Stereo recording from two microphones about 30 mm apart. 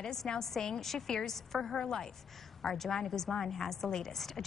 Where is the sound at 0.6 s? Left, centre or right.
Centre.